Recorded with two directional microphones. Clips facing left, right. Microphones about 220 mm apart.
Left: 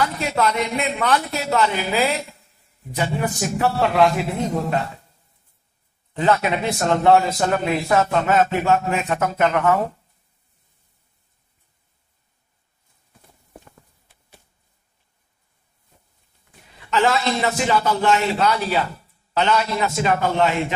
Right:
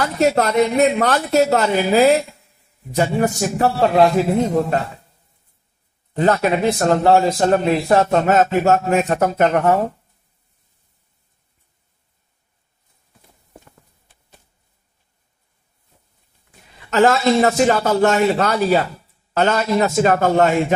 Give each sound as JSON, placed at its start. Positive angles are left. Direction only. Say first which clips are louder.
{"t": 0.0, "sound": "a man's voice", "louder": "right 5 dB", "side_deg": -45}
{"t": 6.1, "sound": "a man's voice", "louder": "right 3 dB", "side_deg": -40}
{"t": 16.9, "sound": "speech", "louder": "right 6 dB", "side_deg": -45}